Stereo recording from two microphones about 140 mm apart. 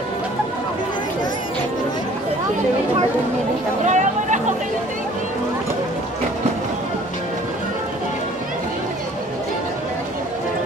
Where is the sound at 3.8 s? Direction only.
60° right (ahead or behind).